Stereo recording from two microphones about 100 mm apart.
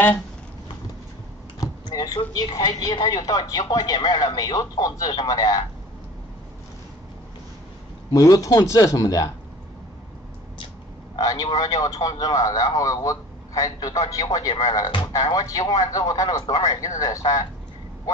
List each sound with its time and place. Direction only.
1.6 s speech: 40° left (ahead or behind)
8.1 s speech: 35° left (ahead or behind)
11.1 s a man's voice: 35° left (ahead or behind)